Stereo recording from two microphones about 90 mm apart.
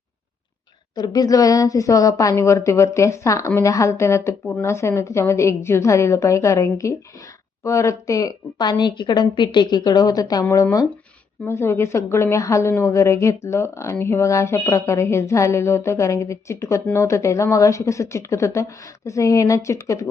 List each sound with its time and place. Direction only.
0.9 s a woman's voice: 45° left (ahead or behind)